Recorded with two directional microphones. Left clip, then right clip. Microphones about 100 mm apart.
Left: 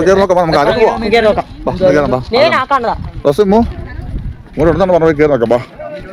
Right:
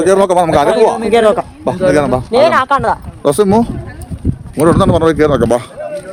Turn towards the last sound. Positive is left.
turn(degrees=-40)  # may be behind; listen again after turning